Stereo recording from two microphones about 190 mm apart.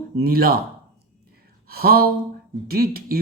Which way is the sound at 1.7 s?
50° right (ahead or behind).